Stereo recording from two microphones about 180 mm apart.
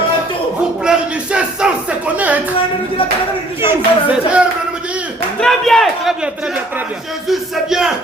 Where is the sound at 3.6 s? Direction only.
10° right (ahead or behind).